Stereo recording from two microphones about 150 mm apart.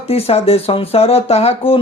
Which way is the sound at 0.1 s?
40° left (ahead or behind).